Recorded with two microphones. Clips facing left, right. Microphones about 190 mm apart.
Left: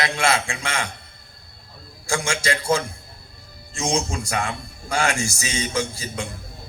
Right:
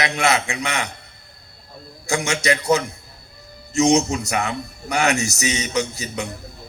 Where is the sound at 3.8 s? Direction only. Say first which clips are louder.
Right 6 dB; 20° right (ahead or behind).